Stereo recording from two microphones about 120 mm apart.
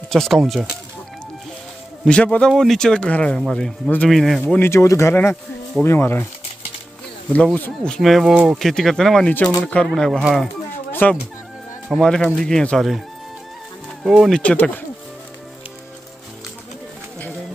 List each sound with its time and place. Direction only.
0.1 s speech: centre (ahead or behind)
2.0 s speech: 10° left (ahead or behind)
4.6 s speech: 20° left (ahead or behind)
7.5 s speech: 10° left (ahead or behind)
10.9 s fowl: 15° left (ahead or behind)
11.9 s speech: 5° left (ahead or behind)
14.0 s speech: 5° right (ahead or behind)
14.3 s speech: 10° left (ahead or behind)